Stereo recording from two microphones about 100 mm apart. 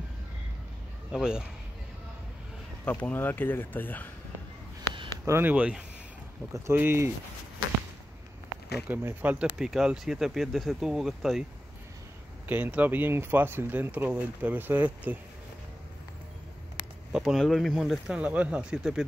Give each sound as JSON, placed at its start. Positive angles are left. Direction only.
{"t": 1.1, "sound": "speech", "side_deg": -5}
{"t": 2.8, "sound": "speech", "side_deg": 15}
{"t": 5.2, "sound": "speech", "side_deg": -25}
{"t": 6.5, "sound": "speech", "side_deg": -25}
{"t": 8.8, "sound": "speech", "side_deg": -20}
{"t": 9.6, "sound": "speech", "side_deg": -5}
{"t": 12.4, "sound": "speech", "side_deg": -15}
{"t": 17.1, "sound": "speech", "side_deg": -5}